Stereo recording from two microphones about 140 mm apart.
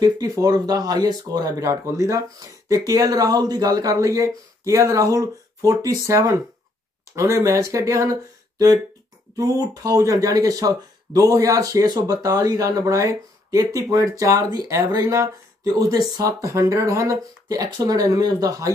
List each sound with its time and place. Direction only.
0.0 s speech: 25° right (ahead or behind)